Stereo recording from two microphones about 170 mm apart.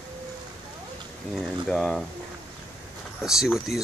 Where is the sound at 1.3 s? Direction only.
Centre (ahead or behind).